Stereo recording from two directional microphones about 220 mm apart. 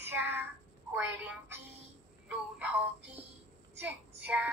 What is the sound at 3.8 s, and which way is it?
Child singing, 5° right (ahead or behind).